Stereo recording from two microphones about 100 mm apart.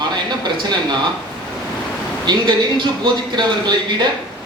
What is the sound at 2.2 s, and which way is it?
A man's voice, 50° right (ahead or behind).